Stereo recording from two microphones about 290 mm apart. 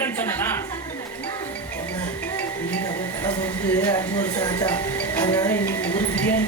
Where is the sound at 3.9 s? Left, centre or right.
Centre.